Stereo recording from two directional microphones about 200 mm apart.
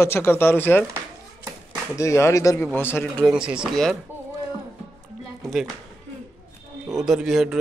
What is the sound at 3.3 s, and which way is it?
Speech, 5° right (ahead or behind).